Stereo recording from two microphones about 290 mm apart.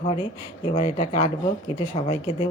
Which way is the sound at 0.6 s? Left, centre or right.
Left.